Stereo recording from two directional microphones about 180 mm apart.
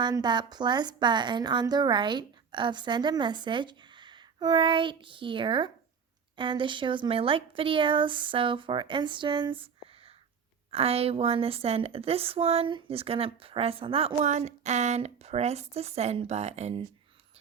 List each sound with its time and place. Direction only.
0.0 s a woman's voice: 25° right (ahead or behind)
10.7 s a woman's voice: 35° right (ahead or behind)